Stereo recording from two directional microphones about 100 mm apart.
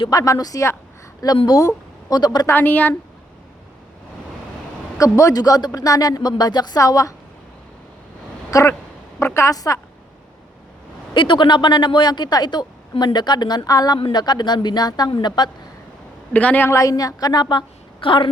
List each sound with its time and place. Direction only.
0.1 s speech: 35° left (ahead or behind)
2.5 s a woman's voice: 20° left (ahead or behind)
4.9 s speech: 30° left (ahead or behind)
8.4 s a woman's voice: 35° left (ahead or behind)
11.1 s speech: 55° left (ahead or behind)
16.3 s a woman's voice: 15° left (ahead or behind)
16.6 s speech: 30° left (ahead or behind); by 18.3 s 55° left (ahead or behind)